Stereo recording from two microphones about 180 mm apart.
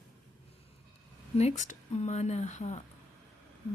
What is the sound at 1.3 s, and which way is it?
A woman's voice, 40° left (ahead or behind).